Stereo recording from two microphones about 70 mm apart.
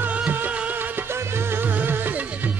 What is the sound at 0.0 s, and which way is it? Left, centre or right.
Music, right.